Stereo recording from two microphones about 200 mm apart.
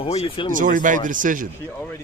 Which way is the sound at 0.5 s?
40° right (ahead or behind).